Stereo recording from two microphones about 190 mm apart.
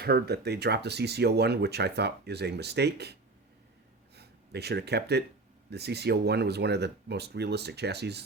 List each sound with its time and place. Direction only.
0.0 s speech: 55° right (ahead or behind)
4.1 s a sound: 60° right (ahead or behind)
5.7 s speech: 60° right (ahead or behind)